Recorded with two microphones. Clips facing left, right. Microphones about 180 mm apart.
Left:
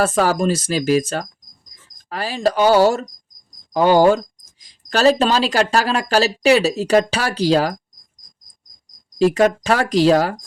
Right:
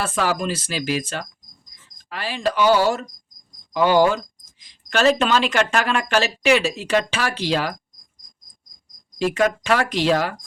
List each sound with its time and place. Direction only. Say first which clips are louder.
0.0 s speech: left 6 dB; 40° left (ahead or behind)
9.1 s speech: left 5 dB; 35° left (ahead or behind)